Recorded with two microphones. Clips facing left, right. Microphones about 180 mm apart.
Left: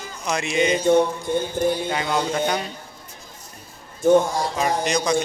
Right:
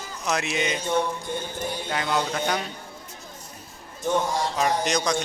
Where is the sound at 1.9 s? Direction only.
Centre (ahead or behind).